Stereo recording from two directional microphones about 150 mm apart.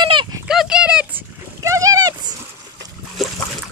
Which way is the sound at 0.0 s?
30° right (ahead or behind).